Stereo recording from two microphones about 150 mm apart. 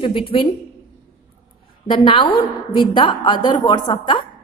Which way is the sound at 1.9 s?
35° left (ahead or behind).